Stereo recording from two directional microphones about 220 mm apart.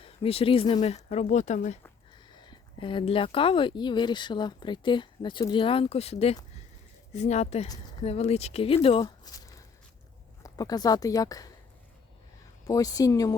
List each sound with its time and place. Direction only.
0.0 s speech: 25° left (ahead or behind)
2.1 s a woman's voice: 20° left (ahead or behind)
12.6 s a woman's voice: 15° left (ahead or behind)